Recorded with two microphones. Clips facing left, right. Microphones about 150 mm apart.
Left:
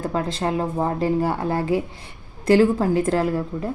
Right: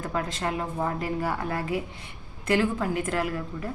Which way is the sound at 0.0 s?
30° left (ahead or behind).